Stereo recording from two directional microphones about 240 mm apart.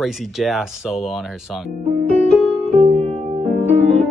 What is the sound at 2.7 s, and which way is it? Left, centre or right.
Music, right.